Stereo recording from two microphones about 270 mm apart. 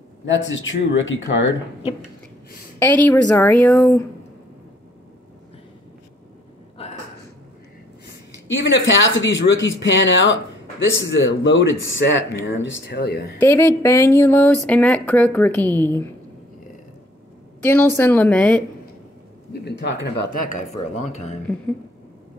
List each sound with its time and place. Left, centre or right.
0.3 s speech: left
2.8 s a woman's voice: centre
8.5 s speech: left
13.4 s a woman's voice: centre
17.6 s a woman's voice: centre
19.6 s speech: left
21.1 s speech: left